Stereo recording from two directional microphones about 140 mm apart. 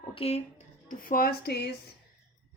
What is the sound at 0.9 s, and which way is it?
Speech, 90° left.